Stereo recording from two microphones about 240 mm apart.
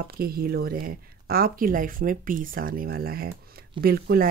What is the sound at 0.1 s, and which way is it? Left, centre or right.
Speech, right.